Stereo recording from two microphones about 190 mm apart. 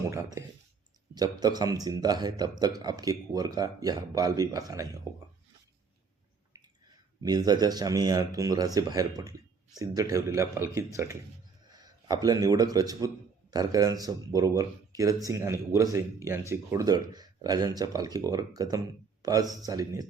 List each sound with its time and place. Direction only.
1.1 s speech: 20° right (ahead or behind)
6.5 s a sound: 15° right (ahead or behind)
7.2 s a man's voice: 20° right (ahead or behind)